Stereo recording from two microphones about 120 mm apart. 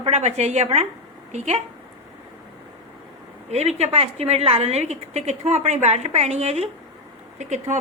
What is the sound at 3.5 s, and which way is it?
A woman's voice, 65° right (ahead or behind).